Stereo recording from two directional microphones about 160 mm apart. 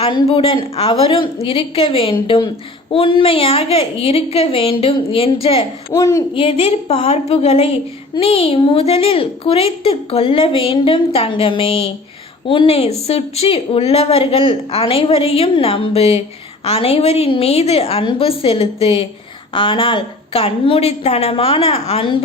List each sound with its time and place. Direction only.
0.0 s a woman's voice: 35° left (ahead or behind)
5.9 s a child's voice: 20° left (ahead or behind)
6.3 s a woman's voice: 35° left (ahead or behind)